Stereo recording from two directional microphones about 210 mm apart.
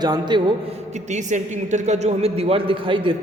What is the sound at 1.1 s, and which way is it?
A man's voice, 35° right (ahead or behind).